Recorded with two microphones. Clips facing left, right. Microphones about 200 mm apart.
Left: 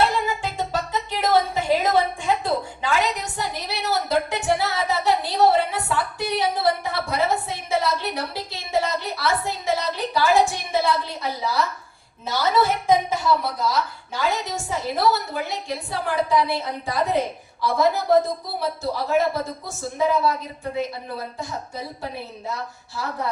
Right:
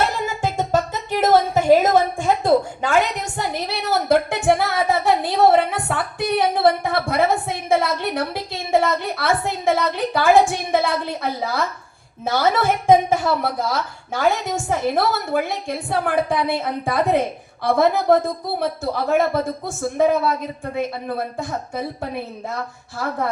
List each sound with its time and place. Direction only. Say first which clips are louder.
0.0 s music: even; 45° right (ahead or behind)
1.2 s a woman's voice: right 5 dB; 45° right (ahead or behind)